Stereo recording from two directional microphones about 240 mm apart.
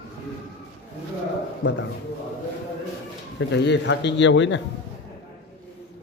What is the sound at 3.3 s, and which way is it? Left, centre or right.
A man's voice, left.